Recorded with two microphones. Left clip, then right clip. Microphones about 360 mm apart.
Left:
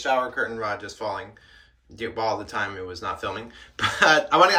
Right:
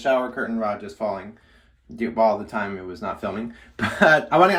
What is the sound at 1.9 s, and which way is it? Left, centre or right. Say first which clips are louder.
Speech: right 6 dB; centre.